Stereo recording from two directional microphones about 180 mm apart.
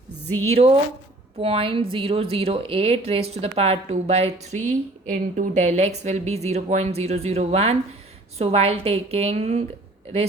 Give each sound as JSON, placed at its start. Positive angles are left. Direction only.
{"t": 0.4, "sound": "a woman's voice", "side_deg": -35}